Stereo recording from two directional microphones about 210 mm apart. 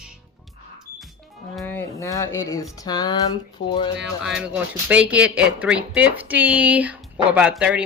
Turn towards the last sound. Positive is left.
turn(degrees=-5)  # may be behind; listen again after turning